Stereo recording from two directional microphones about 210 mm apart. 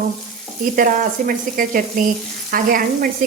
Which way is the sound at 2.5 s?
45° right (ahead or behind).